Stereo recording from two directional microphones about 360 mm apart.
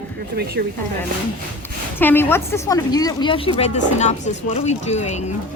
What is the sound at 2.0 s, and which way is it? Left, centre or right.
A woman's voice, centre.